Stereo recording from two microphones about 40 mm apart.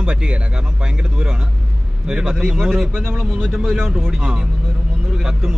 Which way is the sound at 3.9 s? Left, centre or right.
Centre.